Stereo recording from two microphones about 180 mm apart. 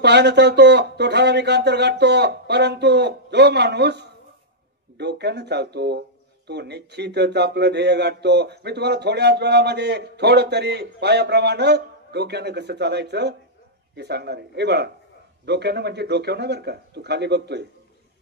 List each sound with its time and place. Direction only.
0.0 s speech: 70° right (ahead or behind)